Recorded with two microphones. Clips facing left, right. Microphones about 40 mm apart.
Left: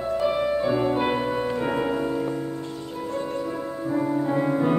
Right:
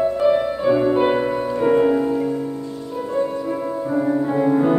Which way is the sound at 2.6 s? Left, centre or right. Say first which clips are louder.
Right 4 dB; left.